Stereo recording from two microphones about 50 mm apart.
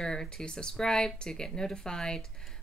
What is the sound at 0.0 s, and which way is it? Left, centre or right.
Speech, centre.